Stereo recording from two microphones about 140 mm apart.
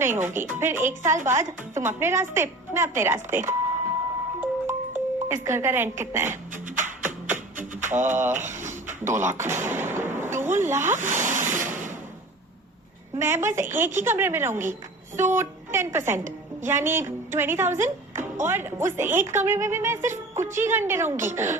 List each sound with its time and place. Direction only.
0.0 s a woman's voice: 15° right (ahead or behind)
4.4 s music: 15° right (ahead or behind)
6.5 s music: 65° right (ahead or behind)
8.0 s a woman's voice: 15° right (ahead or behind)
8.4 s a sound: 60° right (ahead or behind)
9.0 s a woman's voice: 15° right (ahead or behind)
10.2 s a sound: 15° right (ahead or behind)
10.5 s speech: 15° right (ahead or behind)
11.3 s rub: 65° right (ahead or behind)
11.7 s a sound: 65° right (ahead or behind)
13.1 s a woman's voice: 15° right (ahead or behind)
17.7 s speech: 65° right (ahead or behind)
18.4 s a woman's voice: 15° right (ahead or behind)